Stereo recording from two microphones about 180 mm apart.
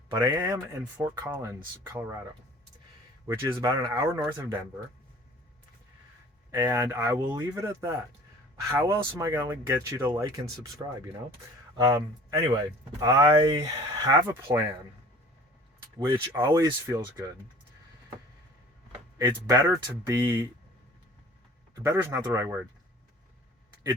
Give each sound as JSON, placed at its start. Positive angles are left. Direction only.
{"t": 0.2, "sound": "speech", "side_deg": -15}
{"t": 3.2, "sound": "speech", "side_deg": -20}
{"t": 6.6, "sound": "speech", "side_deg": -20}
{"t": 16.0, "sound": "speech", "side_deg": -15}
{"t": 19.2, "sound": "speech", "side_deg": -15}
{"t": 21.8, "sound": "speech", "side_deg": -15}